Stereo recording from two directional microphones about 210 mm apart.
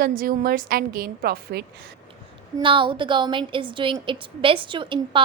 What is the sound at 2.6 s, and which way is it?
A woman's voice, 25° right (ahead or behind).